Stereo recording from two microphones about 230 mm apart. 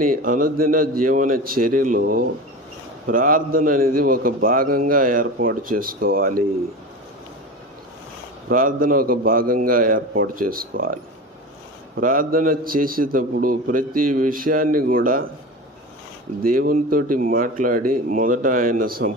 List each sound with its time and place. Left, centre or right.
0.0 s a man's voice: right
8.5 s a man's voice: right
12.0 s a man's voice: right
16.4 s a man's voice: right